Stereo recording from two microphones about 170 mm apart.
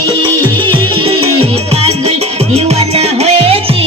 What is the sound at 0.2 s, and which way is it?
Music, 30° right (ahead or behind).